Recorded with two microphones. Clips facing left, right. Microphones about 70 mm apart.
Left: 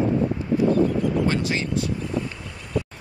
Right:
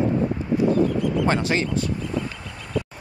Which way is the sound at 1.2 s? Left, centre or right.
Right.